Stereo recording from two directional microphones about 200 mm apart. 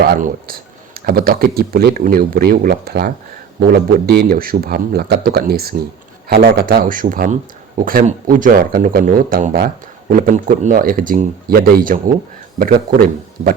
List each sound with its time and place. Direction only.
0.0 s a man's voice: 45° right (ahead or behind)